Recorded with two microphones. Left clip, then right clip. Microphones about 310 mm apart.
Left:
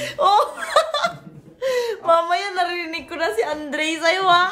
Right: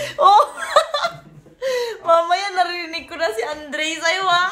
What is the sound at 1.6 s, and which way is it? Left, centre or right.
A woman's voice, centre.